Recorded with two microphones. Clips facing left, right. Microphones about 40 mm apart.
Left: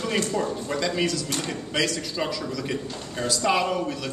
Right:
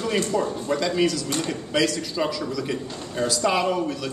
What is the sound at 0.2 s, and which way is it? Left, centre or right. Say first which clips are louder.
Speech: right 2 dB; centre.